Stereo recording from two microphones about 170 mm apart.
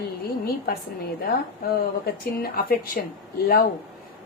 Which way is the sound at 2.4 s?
60° left (ahead or behind).